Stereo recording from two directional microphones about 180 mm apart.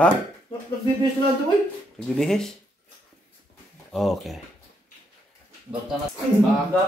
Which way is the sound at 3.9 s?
Centre (ahead or behind).